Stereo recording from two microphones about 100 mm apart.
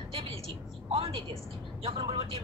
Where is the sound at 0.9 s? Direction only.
75° right (ahead or behind).